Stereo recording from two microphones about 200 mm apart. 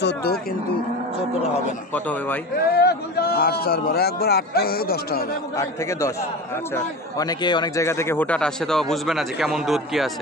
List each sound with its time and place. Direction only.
0.0 s a man's voice: 50° left (ahead or behind)
2.7 s a man's voice: 55° left (ahead or behind)
5.6 s a man's voice: 15° left (ahead or behind); by 10.1 s centre (ahead or behind)